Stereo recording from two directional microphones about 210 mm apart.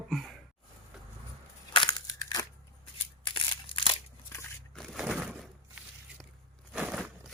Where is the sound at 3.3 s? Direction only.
25° left (ahead or behind).